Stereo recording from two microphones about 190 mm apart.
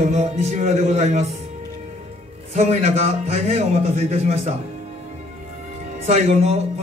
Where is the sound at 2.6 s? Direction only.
35° right (ahead or behind).